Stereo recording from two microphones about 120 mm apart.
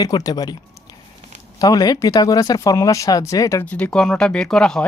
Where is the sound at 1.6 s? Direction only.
30° left (ahead or behind).